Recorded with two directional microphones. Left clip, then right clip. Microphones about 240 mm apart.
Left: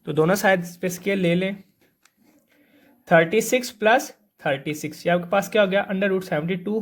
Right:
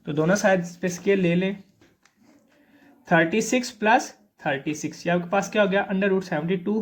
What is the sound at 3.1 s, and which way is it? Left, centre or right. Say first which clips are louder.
Speech: left 3 dB; left.